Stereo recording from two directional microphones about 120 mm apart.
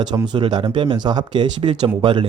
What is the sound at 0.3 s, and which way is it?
Speech, 40° right (ahead or behind).